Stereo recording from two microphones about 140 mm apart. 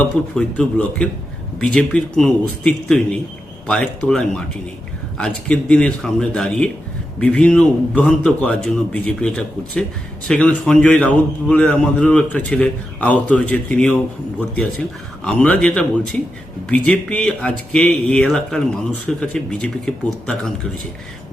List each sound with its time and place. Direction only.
0.3 s a man's voice: 5° left (ahead or behind)